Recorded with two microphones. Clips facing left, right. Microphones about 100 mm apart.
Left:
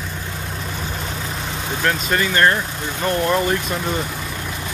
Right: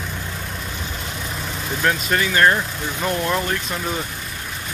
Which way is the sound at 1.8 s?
Centre (ahead or behind).